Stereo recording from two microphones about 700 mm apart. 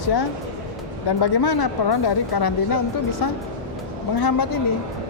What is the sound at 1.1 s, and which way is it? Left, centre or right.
A woman's voice, left.